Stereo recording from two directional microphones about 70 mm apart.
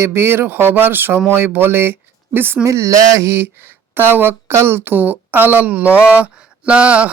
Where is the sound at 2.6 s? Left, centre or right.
Right.